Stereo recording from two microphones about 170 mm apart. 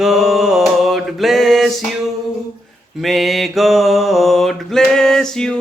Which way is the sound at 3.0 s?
Centre (ahead or behind).